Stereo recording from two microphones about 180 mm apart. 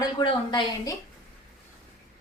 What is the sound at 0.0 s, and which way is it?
Speech, 25° left (ahead or behind).